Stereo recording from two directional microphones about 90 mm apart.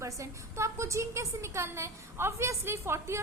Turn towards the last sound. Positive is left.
turn(degrees=-30)  # may be behind; listen again after turning